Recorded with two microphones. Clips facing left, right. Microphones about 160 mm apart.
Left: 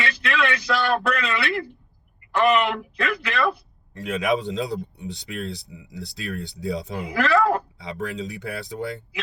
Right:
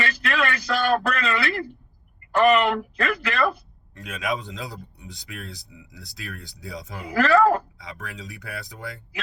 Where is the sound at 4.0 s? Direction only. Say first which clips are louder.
Left 6 dB; 25° left (ahead or behind).